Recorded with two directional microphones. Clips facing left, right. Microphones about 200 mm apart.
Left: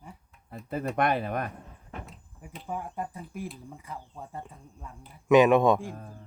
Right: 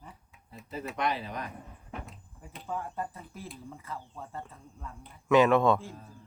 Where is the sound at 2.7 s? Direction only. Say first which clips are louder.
Left 1 dB; 15° left (ahead or behind).